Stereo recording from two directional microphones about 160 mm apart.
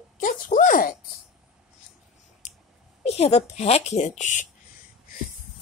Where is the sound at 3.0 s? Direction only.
40° left (ahead or behind).